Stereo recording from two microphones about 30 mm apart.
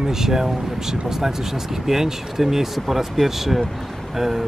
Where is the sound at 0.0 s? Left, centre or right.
Centre.